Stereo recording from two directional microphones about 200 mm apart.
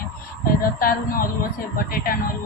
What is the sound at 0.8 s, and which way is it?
A woman's voice, 45° left (ahead or behind).